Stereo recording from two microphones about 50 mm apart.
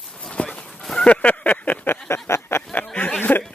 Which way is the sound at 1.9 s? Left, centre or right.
Left.